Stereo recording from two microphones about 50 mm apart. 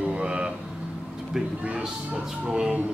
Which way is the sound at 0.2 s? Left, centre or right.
Centre.